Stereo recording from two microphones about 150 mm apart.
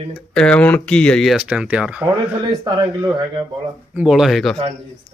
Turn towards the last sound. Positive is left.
turn(degrees=0)  # may be behind; listen again after turning